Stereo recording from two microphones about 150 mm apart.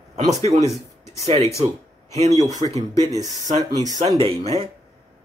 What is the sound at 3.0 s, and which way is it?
Speech, 25° right (ahead or behind).